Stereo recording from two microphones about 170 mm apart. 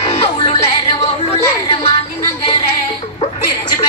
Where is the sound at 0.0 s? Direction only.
35° left (ahead or behind).